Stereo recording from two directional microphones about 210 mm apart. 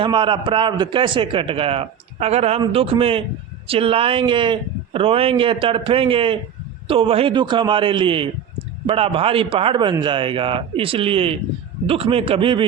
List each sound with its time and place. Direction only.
0.0 s a man's voice: 25° right (ahead or behind)